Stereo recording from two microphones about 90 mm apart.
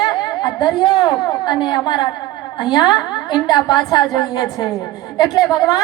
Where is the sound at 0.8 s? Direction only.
55° left (ahead or behind).